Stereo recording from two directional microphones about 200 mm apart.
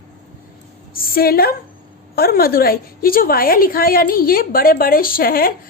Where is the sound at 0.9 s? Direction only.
45° left (ahead or behind).